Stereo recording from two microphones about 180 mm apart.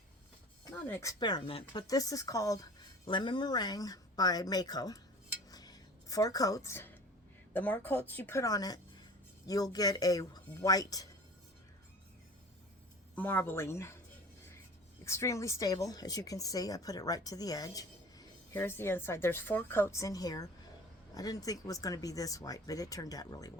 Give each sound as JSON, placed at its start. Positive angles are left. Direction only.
{"t": 0.9, "sound": "speech", "side_deg": 15}
{"t": 1.2, "sound": "speech", "side_deg": 25}
{"t": 5.5, "sound": "a sound", "side_deg": 20}
{"t": 7.5, "sound": "speech", "side_deg": 10}
{"t": 13.1, "sound": "speech", "side_deg": 10}
{"t": 15.0, "sound": "speech", "side_deg": 15}